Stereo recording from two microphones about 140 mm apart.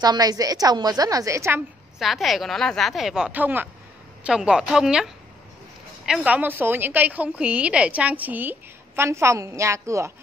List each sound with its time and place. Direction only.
0.0 s a woman's voice: 30° right (ahead or behind)
2.0 s a woman's voice: centre (ahead or behind); by 10.1 s 20° right (ahead or behind)